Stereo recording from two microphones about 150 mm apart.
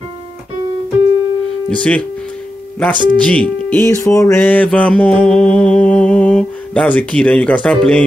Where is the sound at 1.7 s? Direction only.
10° left (ahead or behind).